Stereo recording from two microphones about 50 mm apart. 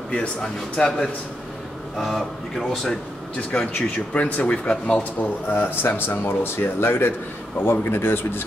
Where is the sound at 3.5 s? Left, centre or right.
Left.